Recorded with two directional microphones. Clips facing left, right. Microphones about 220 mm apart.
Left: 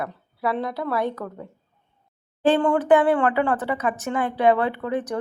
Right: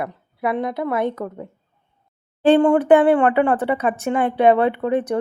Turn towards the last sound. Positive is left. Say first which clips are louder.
# right 6 dB
turn(degrees=-25)  # may be behind; listen again after turning